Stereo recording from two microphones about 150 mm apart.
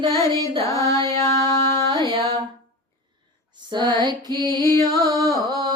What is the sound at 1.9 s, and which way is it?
Music, 30° right (ahead or behind).